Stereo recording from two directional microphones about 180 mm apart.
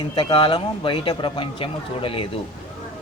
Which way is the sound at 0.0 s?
30° left (ahead or behind).